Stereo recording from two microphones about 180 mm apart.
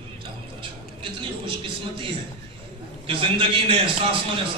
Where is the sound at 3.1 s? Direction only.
30° right (ahead or behind).